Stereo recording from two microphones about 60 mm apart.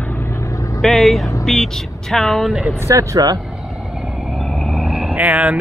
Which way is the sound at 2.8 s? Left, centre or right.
Right.